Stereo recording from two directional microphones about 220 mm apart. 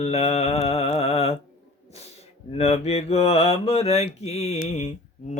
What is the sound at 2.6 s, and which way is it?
Mantra, 30° left (ahead or behind).